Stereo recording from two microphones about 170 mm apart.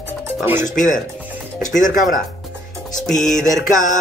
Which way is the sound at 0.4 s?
15° right (ahead or behind).